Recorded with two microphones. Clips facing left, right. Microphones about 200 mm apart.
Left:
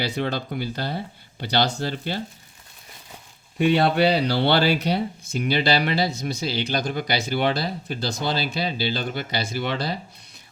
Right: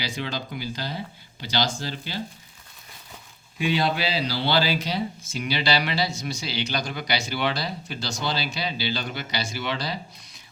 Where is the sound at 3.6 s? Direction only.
60° left (ahead or behind).